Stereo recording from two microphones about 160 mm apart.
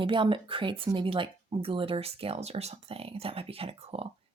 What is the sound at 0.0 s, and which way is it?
Speech, 30° right (ahead or behind).